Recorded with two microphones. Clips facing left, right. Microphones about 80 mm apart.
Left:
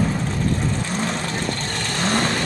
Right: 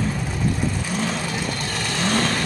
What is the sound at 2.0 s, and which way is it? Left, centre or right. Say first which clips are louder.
Vehicle: left 1 dB; centre.